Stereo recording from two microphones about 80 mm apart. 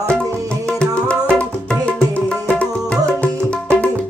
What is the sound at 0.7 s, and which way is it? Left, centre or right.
Music, centre.